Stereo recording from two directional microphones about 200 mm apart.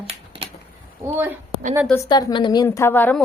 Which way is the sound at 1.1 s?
10° right (ahead or behind).